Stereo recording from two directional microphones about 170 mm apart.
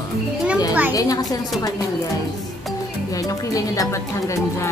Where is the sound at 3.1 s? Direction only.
20° left (ahead or behind).